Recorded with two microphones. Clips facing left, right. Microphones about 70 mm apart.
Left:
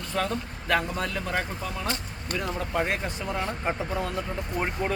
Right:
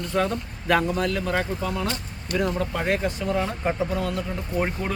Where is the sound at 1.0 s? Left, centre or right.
Centre.